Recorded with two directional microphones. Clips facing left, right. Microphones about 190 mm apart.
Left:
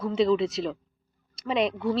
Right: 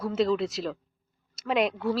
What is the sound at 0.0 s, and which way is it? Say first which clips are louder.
Speech: left 2 dB; centre (ahead or behind).